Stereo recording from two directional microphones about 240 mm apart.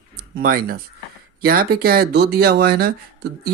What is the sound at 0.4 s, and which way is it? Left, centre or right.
Speech, right.